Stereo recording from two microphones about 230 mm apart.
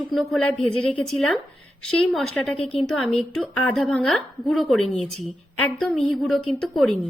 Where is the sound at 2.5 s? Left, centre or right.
Left.